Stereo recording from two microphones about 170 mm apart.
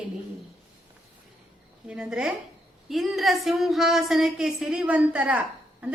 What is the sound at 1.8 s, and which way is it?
A woman's voice, 5° right (ahead or behind).